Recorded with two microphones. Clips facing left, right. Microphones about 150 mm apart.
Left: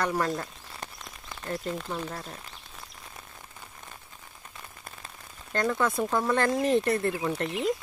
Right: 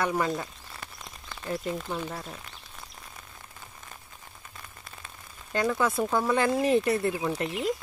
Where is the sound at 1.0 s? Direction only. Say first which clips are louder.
Even; centre (ahead or behind).